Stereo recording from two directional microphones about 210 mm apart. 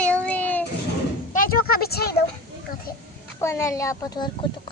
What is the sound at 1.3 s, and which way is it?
Speech, 40° left (ahead or behind).